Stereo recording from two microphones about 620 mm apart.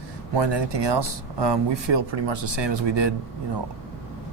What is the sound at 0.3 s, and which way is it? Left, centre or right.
Speech, right.